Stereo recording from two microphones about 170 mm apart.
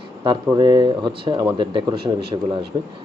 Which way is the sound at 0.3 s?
25° right (ahead or behind).